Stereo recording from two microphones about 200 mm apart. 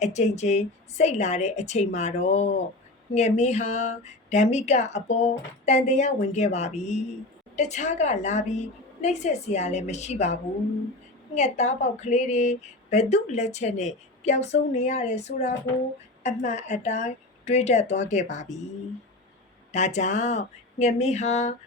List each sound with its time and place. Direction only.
0.0 s speech: 35° left (ahead or behind)
11.3 s speech: 35° left (ahead or behind)
19.7 s speech: 35° left (ahead or behind)